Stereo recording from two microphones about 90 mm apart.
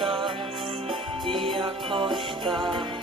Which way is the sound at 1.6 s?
70° right (ahead or behind).